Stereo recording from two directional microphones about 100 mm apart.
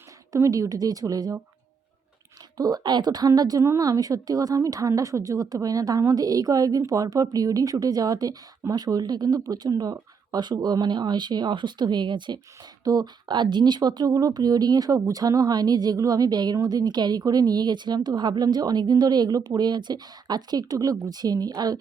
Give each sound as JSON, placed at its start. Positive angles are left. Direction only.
{"t": 0.3, "sound": "a woman's voice", "side_deg": -30}
{"t": 2.6, "sound": "a woman's voice", "side_deg": -40}